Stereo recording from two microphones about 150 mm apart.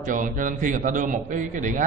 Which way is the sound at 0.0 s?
60° right (ahead or behind).